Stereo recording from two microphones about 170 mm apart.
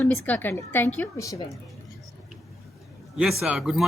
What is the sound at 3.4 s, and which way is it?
Speech, 5° right (ahead or behind).